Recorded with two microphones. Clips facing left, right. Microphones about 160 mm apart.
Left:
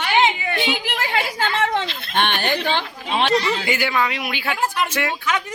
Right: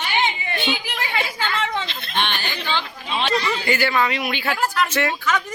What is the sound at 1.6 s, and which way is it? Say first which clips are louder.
Chicken: left 6 dB; 50° left (ahead or behind).